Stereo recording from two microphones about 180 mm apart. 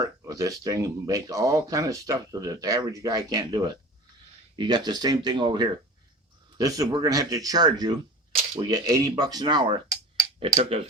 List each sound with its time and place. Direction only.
0.0 s speech: 20° right (ahead or behind)